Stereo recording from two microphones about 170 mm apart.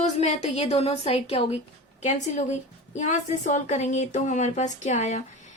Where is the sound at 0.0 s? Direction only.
40° left (ahead or behind).